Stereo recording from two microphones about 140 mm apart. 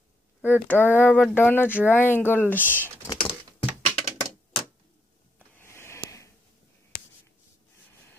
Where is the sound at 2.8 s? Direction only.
20° left (ahead or behind).